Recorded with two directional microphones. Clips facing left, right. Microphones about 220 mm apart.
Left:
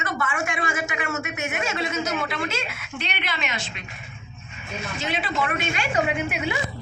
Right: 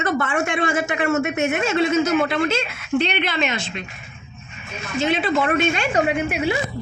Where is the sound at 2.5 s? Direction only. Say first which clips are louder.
Right 10 dB; 30° right (ahead or behind).